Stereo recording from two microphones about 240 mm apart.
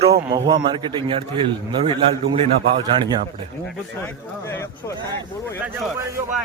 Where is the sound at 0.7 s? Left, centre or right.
Centre.